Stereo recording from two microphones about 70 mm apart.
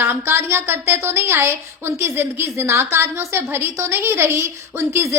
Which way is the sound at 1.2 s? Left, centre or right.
Right.